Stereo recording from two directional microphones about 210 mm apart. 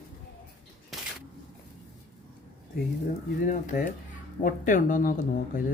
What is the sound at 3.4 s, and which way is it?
Speech, 40° left (ahead or behind).